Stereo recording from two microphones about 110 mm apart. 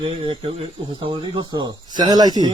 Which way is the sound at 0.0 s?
50° right (ahead or behind).